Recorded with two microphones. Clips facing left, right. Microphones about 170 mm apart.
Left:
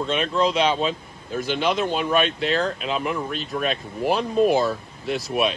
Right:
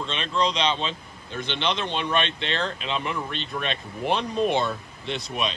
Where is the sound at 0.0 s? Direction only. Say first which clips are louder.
Left 4 dB; 10° left (ahead or behind).